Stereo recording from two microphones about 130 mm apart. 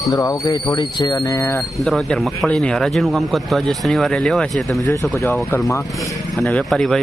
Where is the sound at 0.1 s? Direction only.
25° left (ahead or behind).